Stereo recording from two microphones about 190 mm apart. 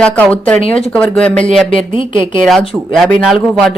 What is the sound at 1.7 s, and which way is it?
Speech, 25° left (ahead or behind).